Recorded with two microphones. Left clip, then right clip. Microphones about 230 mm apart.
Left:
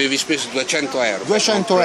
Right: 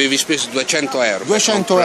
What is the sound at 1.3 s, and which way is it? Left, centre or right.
Speech, centre.